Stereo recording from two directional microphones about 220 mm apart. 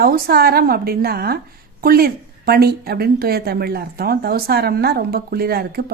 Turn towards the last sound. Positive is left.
turn(degrees=-45)  # may be behind; listen again after turning